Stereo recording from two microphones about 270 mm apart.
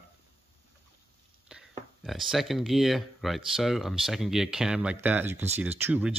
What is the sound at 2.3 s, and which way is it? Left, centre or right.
Speech, centre.